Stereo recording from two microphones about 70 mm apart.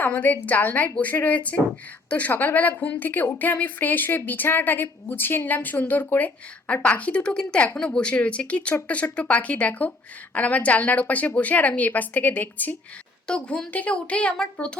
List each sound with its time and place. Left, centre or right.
0.0 s a woman's voice: left
13.2 s a woman's voice: centre